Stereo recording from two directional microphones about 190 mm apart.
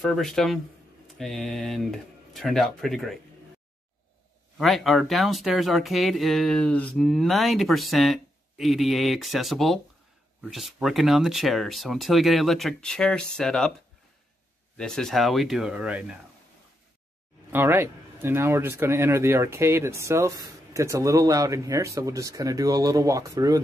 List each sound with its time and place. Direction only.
0.0 s speech: centre (ahead or behind)
4.6 s speech: centre (ahead or behind)
14.8 s speech: 5° left (ahead or behind)
17.5 s speech: 10° right (ahead or behind)